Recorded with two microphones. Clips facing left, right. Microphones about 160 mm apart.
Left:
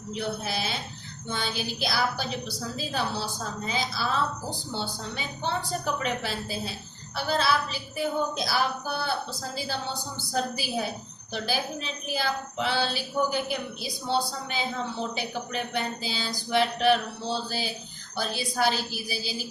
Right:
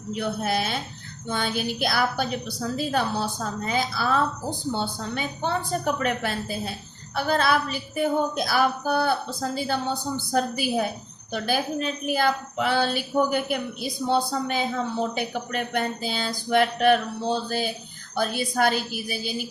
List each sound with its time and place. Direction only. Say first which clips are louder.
0.2 s a woman's voice: right 5 dB; 55° right (ahead or behind)